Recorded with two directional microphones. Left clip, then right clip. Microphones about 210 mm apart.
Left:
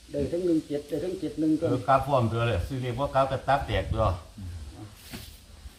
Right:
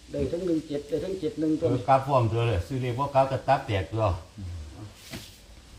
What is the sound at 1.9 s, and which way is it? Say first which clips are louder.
A man's voice: right 1 dB; centre (ahead or behind).